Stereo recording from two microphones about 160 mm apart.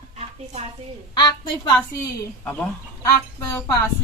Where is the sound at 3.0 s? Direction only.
20° left (ahead or behind).